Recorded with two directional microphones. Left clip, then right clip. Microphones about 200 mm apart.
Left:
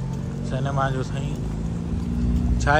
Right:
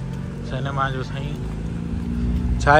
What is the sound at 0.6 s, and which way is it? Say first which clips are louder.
Speech: right 1 dB; 15° left (ahead or behind).